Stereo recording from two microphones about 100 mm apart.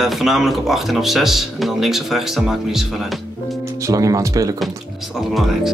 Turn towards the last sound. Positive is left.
turn(degrees=0)  # may be behind; listen again after turning